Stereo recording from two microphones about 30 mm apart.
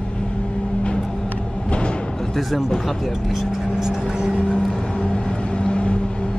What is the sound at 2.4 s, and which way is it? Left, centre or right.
Speech, centre.